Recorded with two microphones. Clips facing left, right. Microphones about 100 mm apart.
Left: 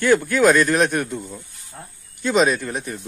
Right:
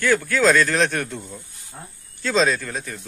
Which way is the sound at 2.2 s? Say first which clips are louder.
Left 2 dB; 15° left (ahead or behind).